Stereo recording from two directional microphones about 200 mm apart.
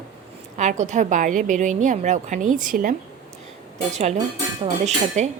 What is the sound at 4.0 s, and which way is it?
A woman's voice, 35° right (ahead or behind).